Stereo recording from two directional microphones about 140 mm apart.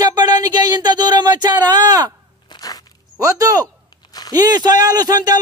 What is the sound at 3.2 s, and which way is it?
Speech, 25° right (ahead or behind).